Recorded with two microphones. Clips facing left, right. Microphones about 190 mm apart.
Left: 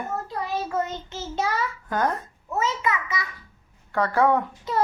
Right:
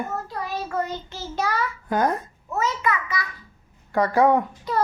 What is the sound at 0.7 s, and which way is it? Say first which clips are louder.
Child singing: even; 20° left (ahead or behind).